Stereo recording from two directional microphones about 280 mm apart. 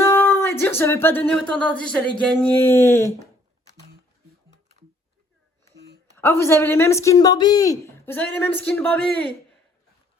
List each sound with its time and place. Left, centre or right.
0.0 s speech: centre
6.1 s speech: centre